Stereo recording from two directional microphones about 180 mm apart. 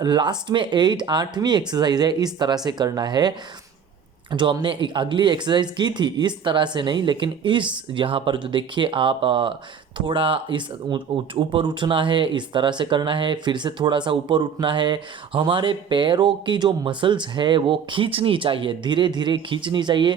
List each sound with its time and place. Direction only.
0.0 s speech: 25° right (ahead or behind)